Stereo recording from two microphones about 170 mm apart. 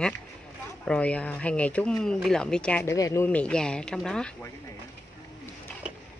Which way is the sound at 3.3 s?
5° left (ahead or behind).